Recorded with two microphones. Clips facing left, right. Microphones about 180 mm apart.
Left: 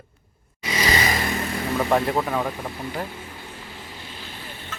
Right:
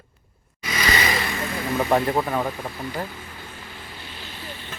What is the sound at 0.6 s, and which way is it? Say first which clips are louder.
Vehicle: left 1 dB; 30° left (ahead or behind).